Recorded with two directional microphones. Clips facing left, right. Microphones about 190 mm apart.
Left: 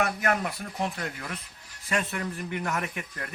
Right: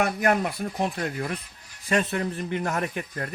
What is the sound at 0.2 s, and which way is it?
Speech, 30° right (ahead or behind).